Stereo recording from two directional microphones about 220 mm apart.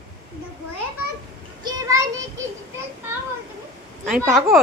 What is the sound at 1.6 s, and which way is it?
Child singing, 15° right (ahead or behind).